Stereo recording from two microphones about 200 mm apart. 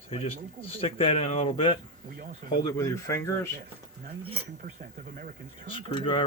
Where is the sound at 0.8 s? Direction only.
30° left (ahead or behind).